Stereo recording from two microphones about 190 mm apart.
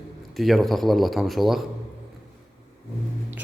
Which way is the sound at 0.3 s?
Centre (ahead or behind).